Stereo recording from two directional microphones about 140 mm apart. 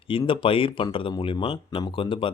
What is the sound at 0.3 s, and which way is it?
Speech, 40° left (ahead or behind).